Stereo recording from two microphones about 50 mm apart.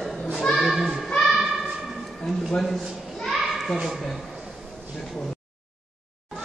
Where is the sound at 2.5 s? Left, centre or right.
Centre.